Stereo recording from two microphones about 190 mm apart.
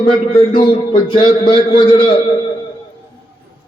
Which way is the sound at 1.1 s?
25° left (ahead or behind).